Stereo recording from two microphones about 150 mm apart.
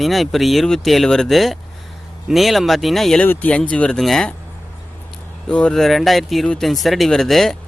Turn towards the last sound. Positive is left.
turn(degrees=0)  # may be behind; listen again after turning